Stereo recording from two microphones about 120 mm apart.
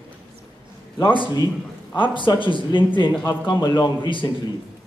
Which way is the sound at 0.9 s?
40° left (ahead or behind).